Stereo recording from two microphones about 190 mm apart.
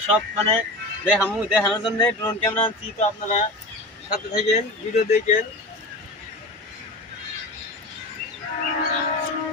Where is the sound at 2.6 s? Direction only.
30° left (ahead or behind).